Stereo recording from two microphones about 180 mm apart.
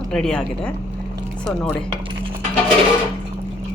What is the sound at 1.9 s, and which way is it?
Cutlery, 25° right (ahead or behind).